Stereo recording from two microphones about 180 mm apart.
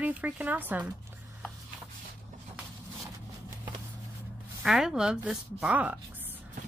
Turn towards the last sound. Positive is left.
turn(degrees=-10)  # may be behind; listen again after turning